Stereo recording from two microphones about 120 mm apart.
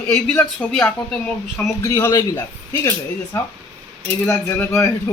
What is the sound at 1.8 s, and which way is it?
Speech, 25° left (ahead or behind).